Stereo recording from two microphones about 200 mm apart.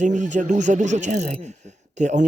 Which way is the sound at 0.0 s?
40° right (ahead or behind).